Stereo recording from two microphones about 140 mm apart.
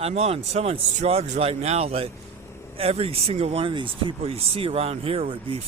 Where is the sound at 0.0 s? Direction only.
50° right (ahead or behind).